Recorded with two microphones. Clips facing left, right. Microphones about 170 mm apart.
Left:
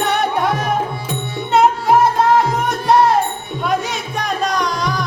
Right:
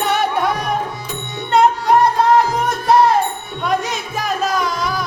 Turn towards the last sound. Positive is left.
turn(degrees=-5)  # may be behind; listen again after turning